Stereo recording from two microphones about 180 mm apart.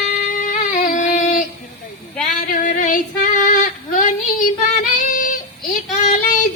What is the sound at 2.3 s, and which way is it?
Female singing, 45° left (ahead or behind).